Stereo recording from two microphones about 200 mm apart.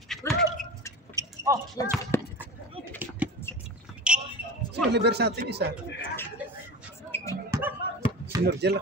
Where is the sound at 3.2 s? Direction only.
5° right (ahead or behind).